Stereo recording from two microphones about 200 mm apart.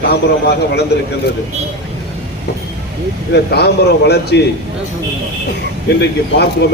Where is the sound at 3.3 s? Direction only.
55° left (ahead or behind).